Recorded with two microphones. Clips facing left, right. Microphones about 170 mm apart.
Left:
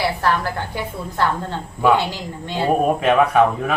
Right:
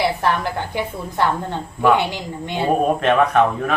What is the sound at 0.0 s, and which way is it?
A woman's voice, 20° right (ahead or behind).